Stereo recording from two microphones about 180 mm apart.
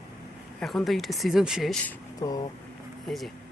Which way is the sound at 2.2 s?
20° left (ahead or behind).